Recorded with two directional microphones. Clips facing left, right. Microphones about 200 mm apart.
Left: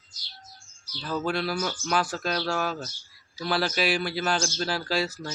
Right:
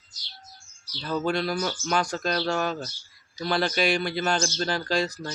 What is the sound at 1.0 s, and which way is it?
Speech, 5° left (ahead or behind).